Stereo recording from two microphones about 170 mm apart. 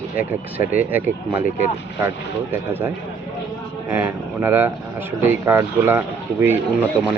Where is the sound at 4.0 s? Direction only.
10° right (ahead or behind).